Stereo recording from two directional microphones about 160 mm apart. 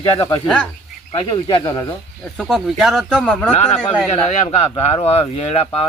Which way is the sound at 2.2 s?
Centre (ahead or behind).